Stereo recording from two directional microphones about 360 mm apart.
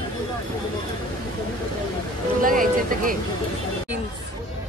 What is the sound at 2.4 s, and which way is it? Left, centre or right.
Speech, right.